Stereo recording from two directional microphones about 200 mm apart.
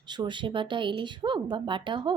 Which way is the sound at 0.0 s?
20° right (ahead or behind).